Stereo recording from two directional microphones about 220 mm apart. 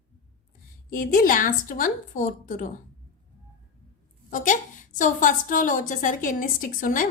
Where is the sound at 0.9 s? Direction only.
40° left (ahead or behind).